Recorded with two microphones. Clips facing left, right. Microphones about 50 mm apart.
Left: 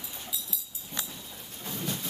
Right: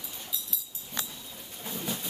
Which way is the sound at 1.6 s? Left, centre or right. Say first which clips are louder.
Even; centre.